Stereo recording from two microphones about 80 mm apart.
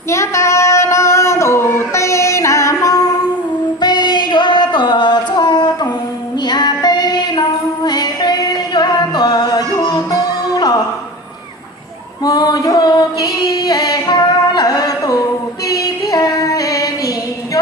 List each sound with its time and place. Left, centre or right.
0.1 s child singing: left
3.8 s singing: left
6.4 s child singing: left
7.9 s music: left
12.2 s female singing: left
15.6 s music: left